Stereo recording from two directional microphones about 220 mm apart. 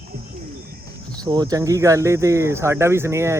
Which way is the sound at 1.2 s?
20° right (ahead or behind).